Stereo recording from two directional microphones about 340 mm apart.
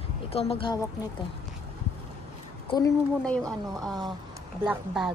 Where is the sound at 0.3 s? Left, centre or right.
Centre.